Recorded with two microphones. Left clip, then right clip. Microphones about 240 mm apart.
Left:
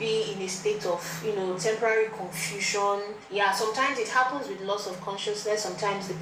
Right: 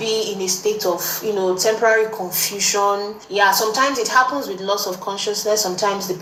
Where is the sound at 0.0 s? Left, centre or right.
Right.